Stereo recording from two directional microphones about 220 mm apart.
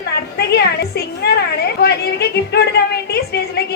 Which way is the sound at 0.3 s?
45° left (ahead or behind).